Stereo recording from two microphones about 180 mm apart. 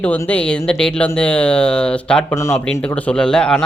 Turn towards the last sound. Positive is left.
turn(degrees=5)  # may be behind; listen again after turning